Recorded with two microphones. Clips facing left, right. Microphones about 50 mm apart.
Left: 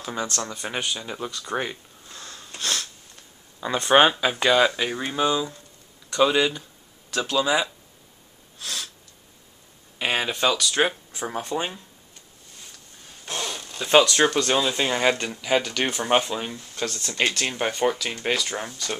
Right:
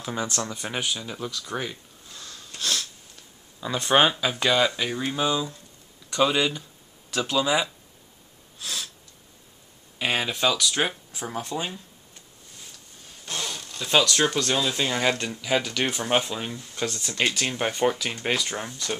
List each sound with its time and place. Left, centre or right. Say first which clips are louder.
0.0 s speech: even; centre
0.9 s speech: left 1 dB; centre
1.5 s a sound: left 3 dB; centre
2.5 s sniff: even; centre
3.9 s speech: left 3 dB; centre
8.5 s sniff: even; centre
9.9 s speech: left 1 dB; centre
13.2 s speech: left 2 dB; centre
16.7 s speech: even; centre